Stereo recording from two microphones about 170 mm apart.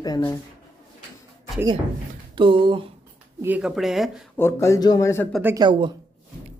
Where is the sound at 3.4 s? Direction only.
5° right (ahead or behind).